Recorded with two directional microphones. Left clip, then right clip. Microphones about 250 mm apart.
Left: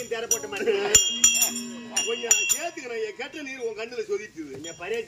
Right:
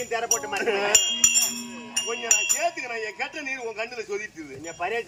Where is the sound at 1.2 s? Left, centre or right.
Centre.